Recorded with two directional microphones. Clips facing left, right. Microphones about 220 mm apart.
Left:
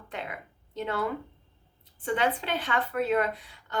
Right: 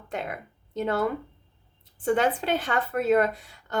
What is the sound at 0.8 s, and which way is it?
Speech, 45° right (ahead or behind).